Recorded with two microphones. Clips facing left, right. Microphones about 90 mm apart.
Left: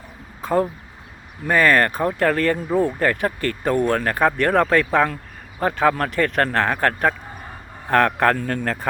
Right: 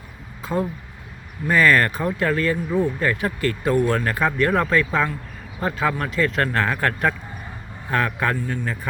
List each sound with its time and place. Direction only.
0.4 s speech: 50° left (ahead or behind)
2.1 s speech: 55° left (ahead or behind)
5.5 s speech: 45° left (ahead or behind)
7.9 s speech: 60° left (ahead or behind)